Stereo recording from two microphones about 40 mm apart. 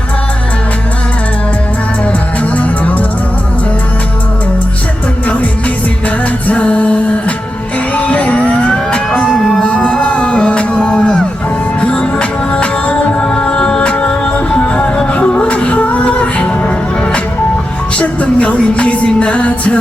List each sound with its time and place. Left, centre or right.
2.4 s music: left
5.3 s music: left
7.9 s fire engine: left
8.7 s vehicle: centre
10.0 s music: left